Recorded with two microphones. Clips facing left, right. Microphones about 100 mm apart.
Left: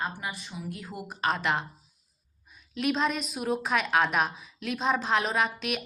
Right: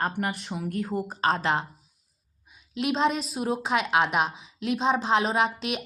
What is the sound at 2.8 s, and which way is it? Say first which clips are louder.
A woman's voice: right 3 dB; 25° right (ahead or behind).